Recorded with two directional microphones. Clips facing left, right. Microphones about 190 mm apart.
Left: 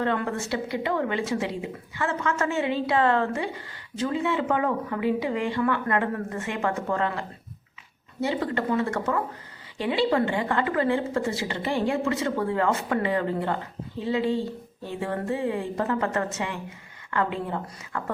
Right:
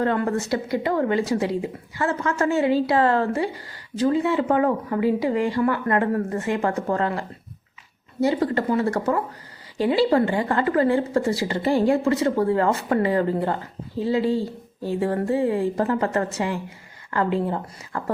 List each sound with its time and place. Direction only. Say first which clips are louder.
0.0 s a woman's voice: right 4 dB; 40° right (ahead or behind)